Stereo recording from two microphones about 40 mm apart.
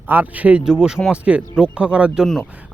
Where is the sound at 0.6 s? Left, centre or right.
Centre.